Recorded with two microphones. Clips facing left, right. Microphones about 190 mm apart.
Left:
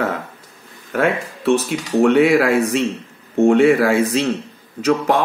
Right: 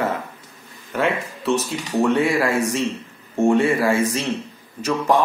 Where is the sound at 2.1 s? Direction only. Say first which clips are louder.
Left 6 dB; 70° left (ahead or behind).